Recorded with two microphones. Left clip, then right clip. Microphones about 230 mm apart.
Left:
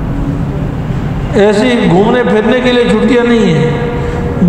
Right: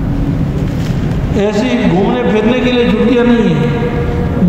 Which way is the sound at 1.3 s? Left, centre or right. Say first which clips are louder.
Left 6 dB; left.